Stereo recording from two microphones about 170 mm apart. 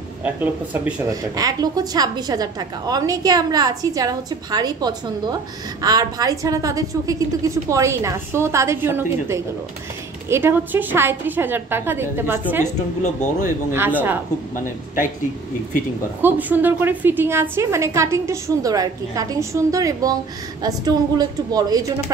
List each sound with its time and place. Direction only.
0.2 s a woman's voice: 5° right (ahead or behind)
1.3 s a woman's voice: 20° right (ahead or behind)
13.0 s speech: 50° left (ahead or behind)
13.7 s a woman's voice: 10° right (ahead or behind)
16.2 s a woman's voice: 10° right (ahead or behind)